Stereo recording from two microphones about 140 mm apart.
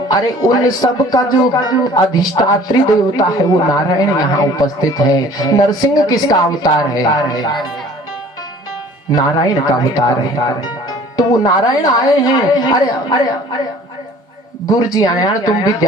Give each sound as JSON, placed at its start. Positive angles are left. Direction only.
{"t": 0.1, "sound": "speech", "side_deg": 30}
{"t": 9.1, "sound": "speech", "side_deg": 30}
{"t": 14.7, "sound": "speech", "side_deg": 30}